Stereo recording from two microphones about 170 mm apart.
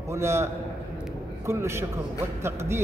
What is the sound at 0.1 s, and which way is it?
A man's voice, 15° right (ahead or behind).